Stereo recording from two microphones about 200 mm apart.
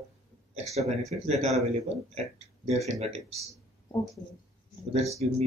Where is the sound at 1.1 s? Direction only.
30° right (ahead or behind).